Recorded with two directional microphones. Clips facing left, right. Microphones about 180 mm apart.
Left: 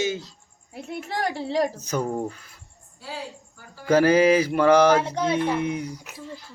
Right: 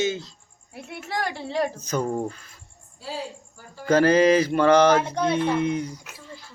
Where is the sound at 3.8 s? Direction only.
10° left (ahead or behind).